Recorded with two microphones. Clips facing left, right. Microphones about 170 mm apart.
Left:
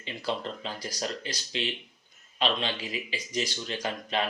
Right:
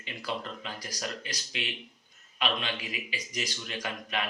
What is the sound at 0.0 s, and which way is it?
Speech, 30° left (ahead or behind).